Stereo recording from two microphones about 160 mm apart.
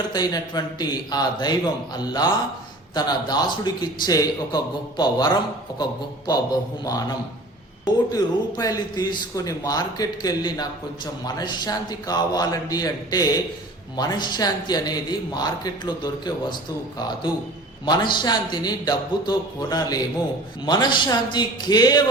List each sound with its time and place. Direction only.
0.1 s speech: 25° left (ahead or behind)
17.8 s speech: 30° left (ahead or behind)